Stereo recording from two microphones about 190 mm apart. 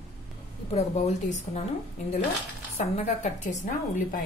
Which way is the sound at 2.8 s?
35° left (ahead or behind).